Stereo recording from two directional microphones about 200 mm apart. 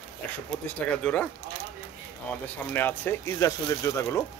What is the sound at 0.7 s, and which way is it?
Speech, 5° left (ahead or behind).